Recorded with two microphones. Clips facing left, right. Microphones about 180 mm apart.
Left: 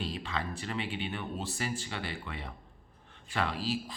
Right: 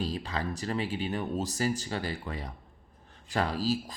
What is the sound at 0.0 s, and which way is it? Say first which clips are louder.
A man's voice: right 3 dB; 40° right (ahead or behind).